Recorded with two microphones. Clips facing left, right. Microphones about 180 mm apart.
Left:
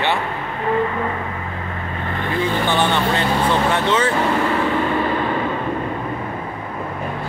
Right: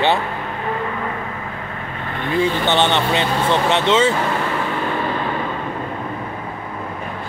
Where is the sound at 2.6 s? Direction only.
25° right (ahead or behind).